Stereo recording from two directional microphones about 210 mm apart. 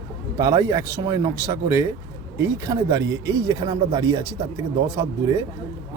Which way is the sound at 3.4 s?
20° right (ahead or behind).